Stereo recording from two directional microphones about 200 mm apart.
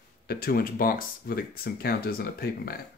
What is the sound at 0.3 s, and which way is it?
Speech, 50° left (ahead or behind).